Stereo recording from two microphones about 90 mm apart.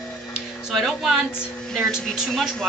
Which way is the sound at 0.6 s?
Centre (ahead or behind).